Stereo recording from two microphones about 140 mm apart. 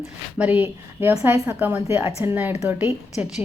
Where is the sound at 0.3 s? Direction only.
10° right (ahead or behind).